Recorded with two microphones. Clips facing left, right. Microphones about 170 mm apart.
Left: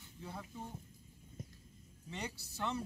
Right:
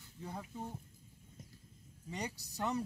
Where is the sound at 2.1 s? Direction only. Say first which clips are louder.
Right 2 dB; 40° right (ahead or behind).